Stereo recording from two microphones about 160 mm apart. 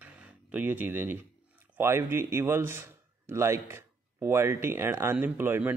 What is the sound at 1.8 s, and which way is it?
A man's voice, 15° right (ahead or behind).